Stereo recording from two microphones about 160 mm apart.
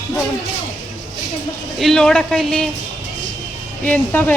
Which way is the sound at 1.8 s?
Centre (ahead or behind).